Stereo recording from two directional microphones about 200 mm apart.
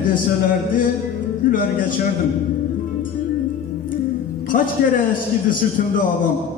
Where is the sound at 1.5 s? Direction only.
45° left (ahead or behind).